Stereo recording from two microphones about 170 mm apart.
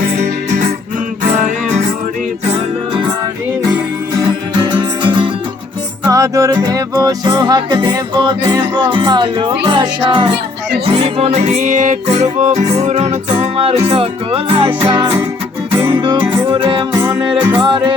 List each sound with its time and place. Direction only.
0.2 s music: 45° right (ahead or behind)
2.5 s music: 30° right (ahead or behind)
4.6 s music: 25° right (ahead or behind)
6.1 s music: 20° right (ahead or behind)
16.0 s music: 25° right (ahead or behind)